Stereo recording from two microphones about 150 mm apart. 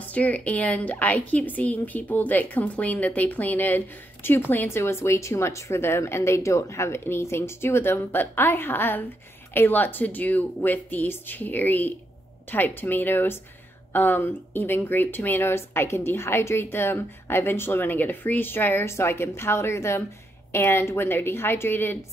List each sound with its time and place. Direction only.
0.0 s speech: 10° left (ahead or behind)